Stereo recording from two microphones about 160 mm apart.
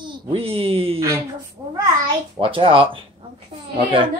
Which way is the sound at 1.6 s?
20° right (ahead or behind).